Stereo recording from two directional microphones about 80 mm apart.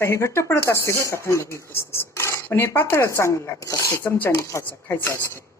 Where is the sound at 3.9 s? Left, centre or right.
Left.